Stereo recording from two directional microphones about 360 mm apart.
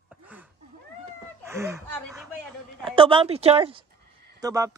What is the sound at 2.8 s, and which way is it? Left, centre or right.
Speech, centre.